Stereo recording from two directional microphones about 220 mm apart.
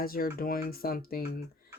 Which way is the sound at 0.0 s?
40° left (ahead or behind).